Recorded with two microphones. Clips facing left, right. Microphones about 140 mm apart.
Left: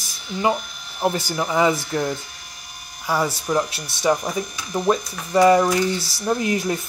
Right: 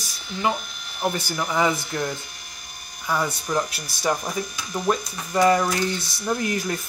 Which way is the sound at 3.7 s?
30° left (ahead or behind).